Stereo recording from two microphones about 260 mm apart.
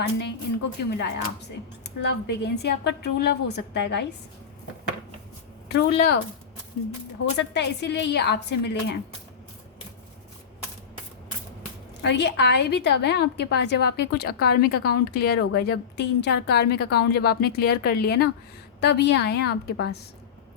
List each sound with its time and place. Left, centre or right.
0.9 s a woman's voice: left
5.6 s a woman's voice: left
7.3 s a woman's voice: left
12.0 s a woman's voice: left